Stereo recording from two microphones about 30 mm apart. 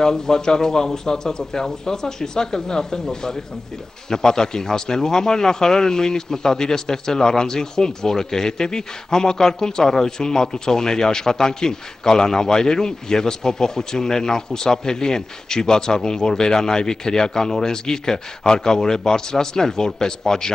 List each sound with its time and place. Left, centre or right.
0.0 s speech: left